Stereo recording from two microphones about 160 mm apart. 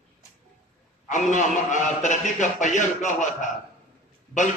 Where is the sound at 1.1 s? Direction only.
50° left (ahead or behind).